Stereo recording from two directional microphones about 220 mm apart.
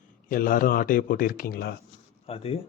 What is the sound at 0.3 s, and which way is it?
Speech, 40° left (ahead or behind).